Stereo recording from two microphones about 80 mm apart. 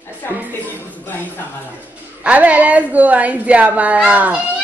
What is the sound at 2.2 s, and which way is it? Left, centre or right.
A woman's voice, centre.